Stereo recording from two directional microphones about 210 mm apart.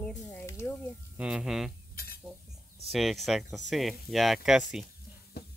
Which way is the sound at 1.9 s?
45° left (ahead or behind).